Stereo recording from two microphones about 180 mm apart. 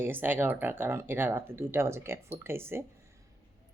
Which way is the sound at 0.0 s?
10° right (ahead or behind).